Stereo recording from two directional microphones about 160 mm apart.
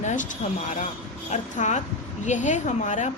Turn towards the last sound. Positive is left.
turn(degrees=50)  # may be behind; listen again after turning